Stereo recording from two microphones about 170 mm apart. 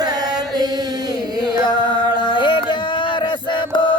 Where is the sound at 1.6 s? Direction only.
30° left (ahead or behind).